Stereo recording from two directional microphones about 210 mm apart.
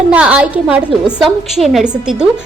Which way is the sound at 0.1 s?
5° right (ahead or behind).